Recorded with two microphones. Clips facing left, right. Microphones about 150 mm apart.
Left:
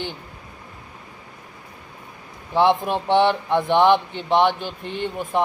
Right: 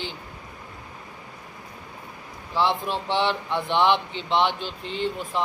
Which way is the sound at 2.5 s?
55° left (ahead or behind).